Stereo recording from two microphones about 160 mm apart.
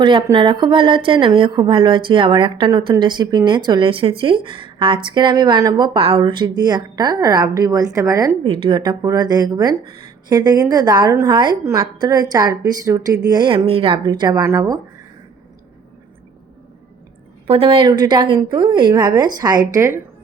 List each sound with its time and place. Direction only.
0.0 s a woman's voice: 30° right (ahead or behind)
8.4 s a woman's voice: 30° right (ahead or behind)
17.4 s a woman's voice: 35° right (ahead or behind); by 20.0 s 20° right (ahead or behind)